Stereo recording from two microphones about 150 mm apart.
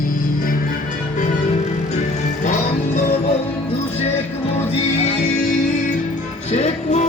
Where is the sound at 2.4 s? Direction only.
55° left (ahead or behind).